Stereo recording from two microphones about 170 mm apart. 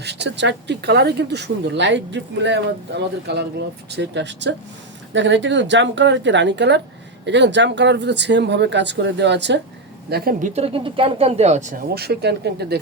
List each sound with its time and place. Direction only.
0.0 s speech: 85° right
10.1 s speech: 65° right (ahead or behind)
10.4 s speech: 40° right (ahead or behind)
11.9 s speech: 75° right (ahead or behind)